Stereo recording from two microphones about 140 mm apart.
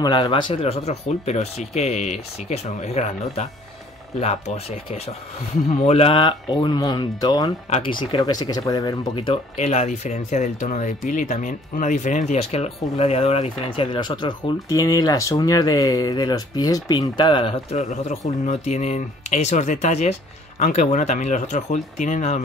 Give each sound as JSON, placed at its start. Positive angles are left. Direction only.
{"t": 0.0, "sound": "speech", "side_deg": 35}
{"t": 9.6, "sound": "speech", "side_deg": 50}